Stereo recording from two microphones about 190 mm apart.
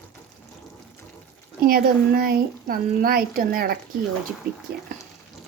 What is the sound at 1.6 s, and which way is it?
A woman's voice, 50° right (ahead or behind).